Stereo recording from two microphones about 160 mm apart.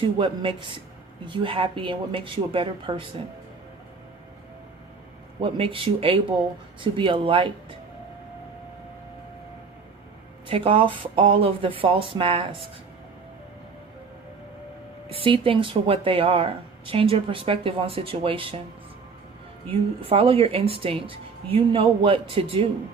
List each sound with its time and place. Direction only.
0.2 s speech: 30° right (ahead or behind)
5.4 s speech: 35° right (ahead or behind)
10.5 s speech: 35° right (ahead or behind)
15.2 s speech: 35° right (ahead or behind)
20.0 s speech: 35° right (ahead or behind)